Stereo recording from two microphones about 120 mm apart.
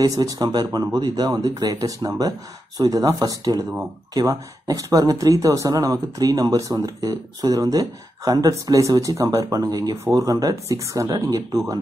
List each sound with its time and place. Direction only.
0.0 s speech: 30° right (ahead or behind)